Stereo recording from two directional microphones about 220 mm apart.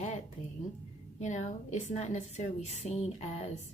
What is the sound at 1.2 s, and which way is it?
A woman's voice, 30° left (ahead or behind).